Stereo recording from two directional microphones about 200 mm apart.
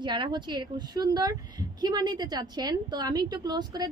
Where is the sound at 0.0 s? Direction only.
20° right (ahead or behind).